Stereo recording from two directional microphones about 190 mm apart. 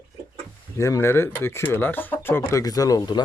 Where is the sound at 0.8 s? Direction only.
15° left (ahead or behind).